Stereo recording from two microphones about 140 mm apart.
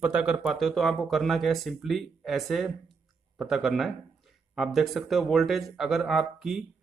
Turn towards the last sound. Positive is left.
turn(degrees=-5)  # may be behind; listen again after turning